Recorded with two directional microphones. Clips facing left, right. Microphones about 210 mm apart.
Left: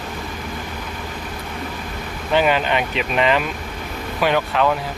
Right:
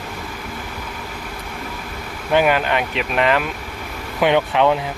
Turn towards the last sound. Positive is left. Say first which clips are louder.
# right 3 dB
turn(degrees=-20)  # may be behind; listen again after turning